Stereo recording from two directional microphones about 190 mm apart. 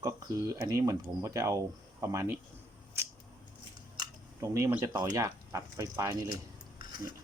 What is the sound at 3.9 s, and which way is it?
Speech, 15° right (ahead or behind).